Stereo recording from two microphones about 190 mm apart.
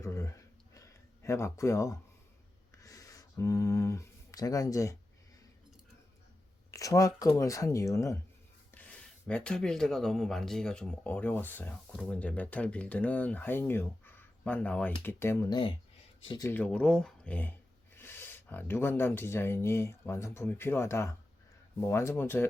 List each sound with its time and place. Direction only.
0.0 s a sound: 15° left (ahead or behind)
6.7 s speech: 15° left (ahead or behind)
16.5 s speech: 10° left (ahead or behind)